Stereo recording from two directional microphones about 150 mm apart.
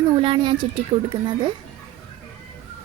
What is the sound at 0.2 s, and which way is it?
Speech, 35° right (ahead or behind).